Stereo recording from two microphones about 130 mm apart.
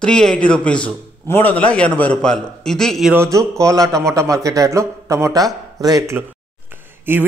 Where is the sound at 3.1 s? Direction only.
25° right (ahead or behind).